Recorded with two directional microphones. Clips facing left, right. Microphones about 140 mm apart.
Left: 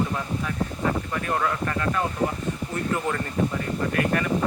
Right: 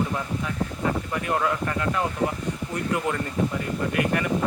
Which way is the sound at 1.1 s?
15° right (ahead or behind).